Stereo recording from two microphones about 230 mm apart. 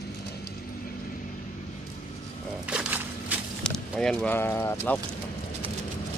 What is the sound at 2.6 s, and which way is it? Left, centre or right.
Speech, centre.